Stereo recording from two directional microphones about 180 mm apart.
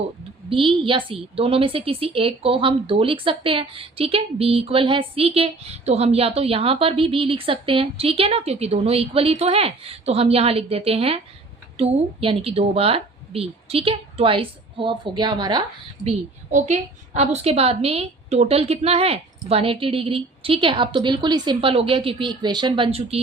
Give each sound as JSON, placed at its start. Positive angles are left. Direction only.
{"t": 0.5, "sound": "a woman's voice", "side_deg": -30}
{"t": 16.0, "sound": "a woman's voice", "side_deg": -40}